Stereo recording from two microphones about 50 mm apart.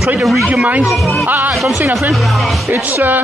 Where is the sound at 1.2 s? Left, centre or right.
Right.